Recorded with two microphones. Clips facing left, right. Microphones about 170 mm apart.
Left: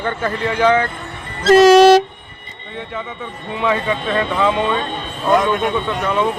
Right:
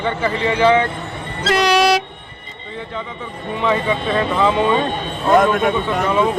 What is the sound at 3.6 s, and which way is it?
A man's voice, centre (ahead or behind).